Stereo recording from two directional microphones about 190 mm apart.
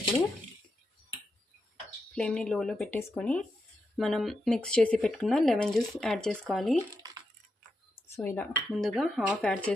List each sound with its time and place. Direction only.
2.1 s speech: 5° left (ahead or behind)
6.9 s a sound: 20° right (ahead or behind)
8.1 s speech: 10° left (ahead or behind)